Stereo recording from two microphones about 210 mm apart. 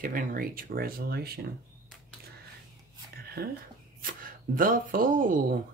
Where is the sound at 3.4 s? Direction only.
50° right (ahead or behind).